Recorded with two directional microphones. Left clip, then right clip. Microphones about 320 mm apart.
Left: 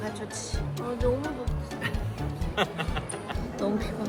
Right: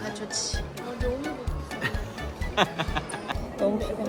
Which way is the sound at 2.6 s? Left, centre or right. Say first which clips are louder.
Right 4 dB; right.